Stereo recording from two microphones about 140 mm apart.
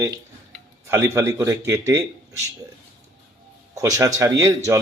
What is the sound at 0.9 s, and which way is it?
Speech, 20° right (ahead or behind).